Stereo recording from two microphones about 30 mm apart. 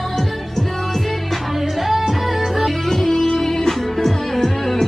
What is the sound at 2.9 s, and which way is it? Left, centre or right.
Music, centre.